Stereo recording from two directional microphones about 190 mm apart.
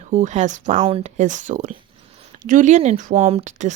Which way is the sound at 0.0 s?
40° right (ahead or behind).